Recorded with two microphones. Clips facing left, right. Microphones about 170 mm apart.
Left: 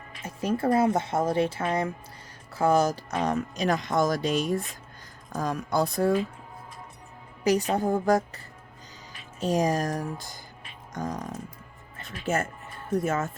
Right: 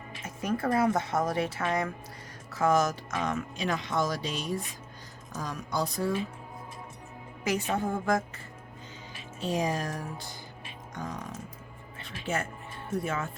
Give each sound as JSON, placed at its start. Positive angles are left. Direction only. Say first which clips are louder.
{"t": 0.3, "sound": "speech", "louder": "left 4 dB", "side_deg": 30}
{"t": 7.4, "sound": "a woman's voice", "louder": "left 6 dB", "side_deg": 35}
{"t": 9.4, "sound": "speech", "louder": "left 5 dB", "side_deg": 45}
{"t": 11.9, "sound": "music", "louder": "left 4 dB", "side_deg": 45}
{"t": 13.0, "sound": "speech", "louder": "left 5 dB", "side_deg": 45}